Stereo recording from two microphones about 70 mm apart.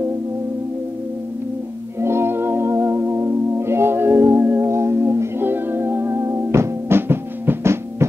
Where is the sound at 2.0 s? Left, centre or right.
Right.